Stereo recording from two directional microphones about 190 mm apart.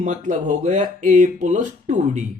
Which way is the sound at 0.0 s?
40° right (ahead or behind).